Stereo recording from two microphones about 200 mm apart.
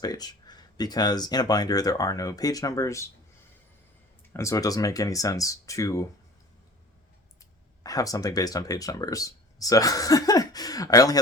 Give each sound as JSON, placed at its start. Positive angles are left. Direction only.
{"t": 0.0, "sound": "speech", "side_deg": 20}
{"t": 4.4, "sound": "speech", "side_deg": 15}
{"t": 7.9, "sound": "speech", "side_deg": 15}